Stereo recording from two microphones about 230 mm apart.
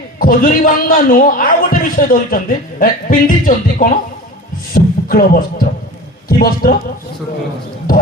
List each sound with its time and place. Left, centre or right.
0.2 s a man's voice: left
4.7 s beatboxing: left
6.2 s a man's voice: left